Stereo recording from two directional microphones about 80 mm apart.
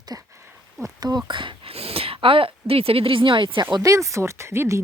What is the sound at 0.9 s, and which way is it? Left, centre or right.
Speech, right.